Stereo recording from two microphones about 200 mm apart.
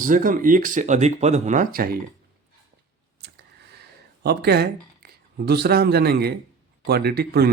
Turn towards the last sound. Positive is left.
turn(degrees=-50)  # may be behind; listen again after turning